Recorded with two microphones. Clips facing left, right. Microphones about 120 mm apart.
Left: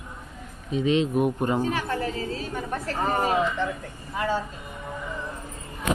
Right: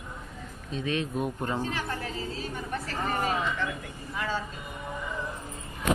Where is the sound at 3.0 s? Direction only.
40° left (ahead or behind).